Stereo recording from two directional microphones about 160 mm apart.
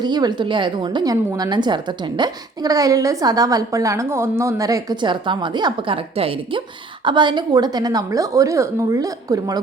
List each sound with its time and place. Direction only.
0.0 s a woman's voice: 25° right (ahead or behind)